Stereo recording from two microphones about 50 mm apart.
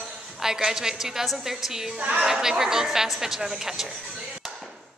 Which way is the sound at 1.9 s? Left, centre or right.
Right.